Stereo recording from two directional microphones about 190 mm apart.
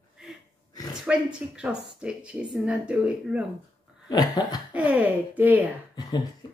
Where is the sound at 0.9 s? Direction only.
5° right (ahead or behind).